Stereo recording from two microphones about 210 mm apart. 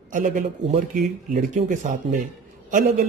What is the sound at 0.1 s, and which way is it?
Speech, 35° right (ahead or behind).